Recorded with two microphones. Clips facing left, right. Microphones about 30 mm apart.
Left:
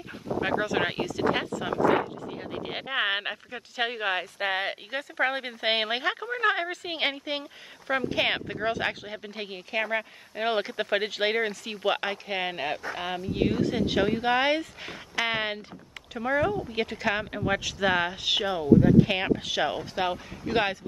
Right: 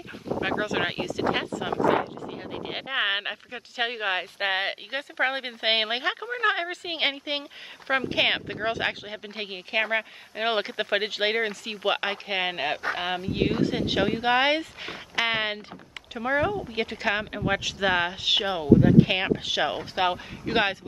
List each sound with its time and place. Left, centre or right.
0.4 s speech: centre
18.5 s speech: right
19.8 s speech: right